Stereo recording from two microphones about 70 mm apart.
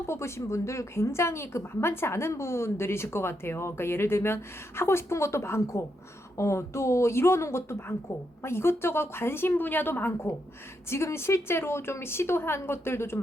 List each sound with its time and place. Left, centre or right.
0.1 s a woman's voice: left